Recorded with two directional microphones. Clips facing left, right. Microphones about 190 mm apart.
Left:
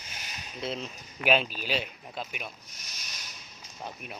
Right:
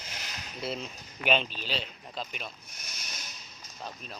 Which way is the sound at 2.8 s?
55° right (ahead or behind).